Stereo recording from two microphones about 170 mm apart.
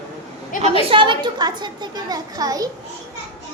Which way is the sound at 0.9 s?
30° right (ahead or behind).